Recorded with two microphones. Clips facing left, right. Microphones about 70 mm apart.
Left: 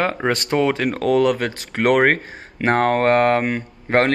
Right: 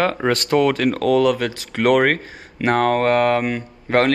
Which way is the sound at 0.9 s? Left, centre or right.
Left.